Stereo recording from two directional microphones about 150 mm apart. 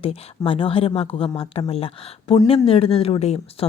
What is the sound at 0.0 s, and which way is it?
A woman's voice, 40° left (ahead or behind).